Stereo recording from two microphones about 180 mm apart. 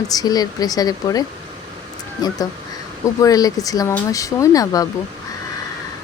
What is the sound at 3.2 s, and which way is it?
Speech, 20° left (ahead or behind).